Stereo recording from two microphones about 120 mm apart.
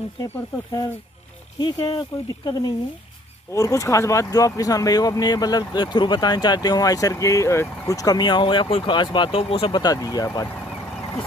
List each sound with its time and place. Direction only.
0.2 s speech: 30° left (ahead or behind)